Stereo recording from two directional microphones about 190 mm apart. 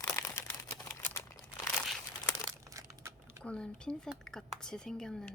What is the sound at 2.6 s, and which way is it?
Crumpling, 15° right (ahead or behind).